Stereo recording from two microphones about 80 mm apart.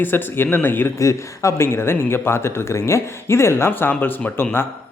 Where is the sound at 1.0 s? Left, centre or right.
Left.